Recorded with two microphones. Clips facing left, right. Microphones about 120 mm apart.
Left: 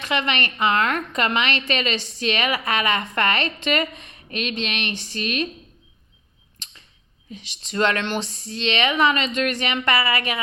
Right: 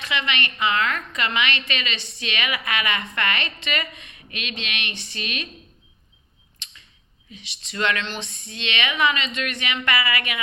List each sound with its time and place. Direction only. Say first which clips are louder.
0.0 s a woman's voice: left 3 dB; 45° left (ahead or behind)
6.6 s arrow: even; 40° left (ahead or behind)
7.3 s a woman's voice: left 5 dB; 45° left (ahead or behind)